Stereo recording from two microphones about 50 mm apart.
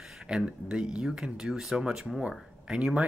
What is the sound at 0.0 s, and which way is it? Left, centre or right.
Speech, centre.